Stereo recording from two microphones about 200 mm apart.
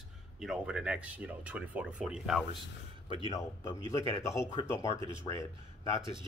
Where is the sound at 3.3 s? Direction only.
15° left (ahead or behind).